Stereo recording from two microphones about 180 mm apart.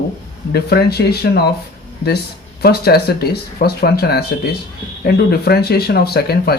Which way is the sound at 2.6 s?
60° left (ahead or behind).